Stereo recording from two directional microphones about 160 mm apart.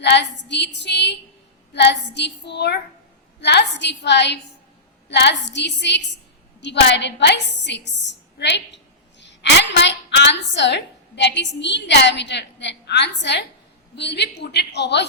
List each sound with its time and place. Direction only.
0.0 s a woman's voice: 90° left